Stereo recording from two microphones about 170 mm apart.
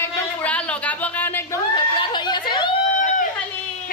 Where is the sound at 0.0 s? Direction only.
10° left (ahead or behind).